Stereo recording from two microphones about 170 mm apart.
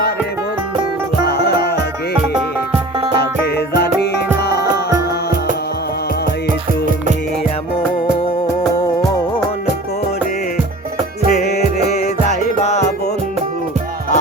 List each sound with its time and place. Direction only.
1.2 s music: 70° left (ahead or behind)
4.4 s music: 70° left (ahead or behind)
11.3 s music: 60° left (ahead or behind)
12.3 s music: 40° left (ahead or behind)